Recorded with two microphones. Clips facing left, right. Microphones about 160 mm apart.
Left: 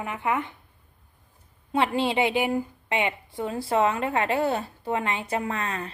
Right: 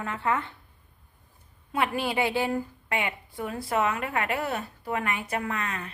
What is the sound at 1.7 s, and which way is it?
A woman's voice, 25° left (ahead or behind).